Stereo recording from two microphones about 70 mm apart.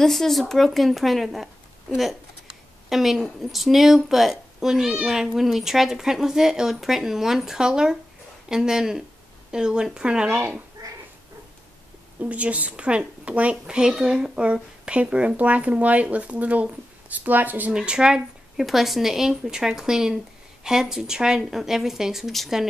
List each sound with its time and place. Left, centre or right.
0.0 s a woman's voice: centre
2.9 s a woman's voice: centre
10.8 s dog: right
12.2 s a child's voice: centre
17.7 s a woman's voice: centre